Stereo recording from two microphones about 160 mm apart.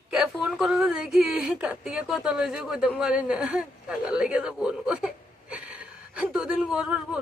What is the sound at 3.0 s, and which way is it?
Speech, 5° right (ahead or behind).